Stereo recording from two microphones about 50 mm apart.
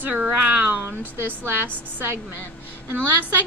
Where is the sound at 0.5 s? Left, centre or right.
Right.